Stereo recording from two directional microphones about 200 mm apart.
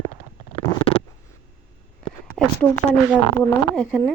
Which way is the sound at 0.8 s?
25° left (ahead or behind).